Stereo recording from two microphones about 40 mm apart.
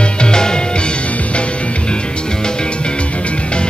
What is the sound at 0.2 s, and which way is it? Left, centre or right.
Music, centre.